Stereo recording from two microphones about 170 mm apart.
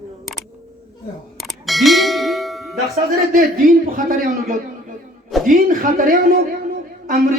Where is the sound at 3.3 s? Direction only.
55° right (ahead or behind).